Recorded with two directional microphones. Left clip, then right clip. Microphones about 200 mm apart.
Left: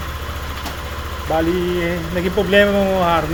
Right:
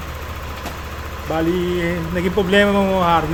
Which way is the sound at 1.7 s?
20° right (ahead or behind).